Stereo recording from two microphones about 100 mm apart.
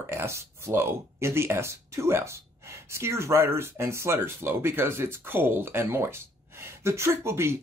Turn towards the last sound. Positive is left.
turn(degrees=-25)  # may be behind; listen again after turning